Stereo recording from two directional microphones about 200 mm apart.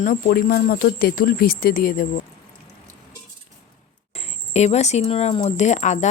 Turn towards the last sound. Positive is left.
turn(degrees=35)  # may be behind; listen again after turning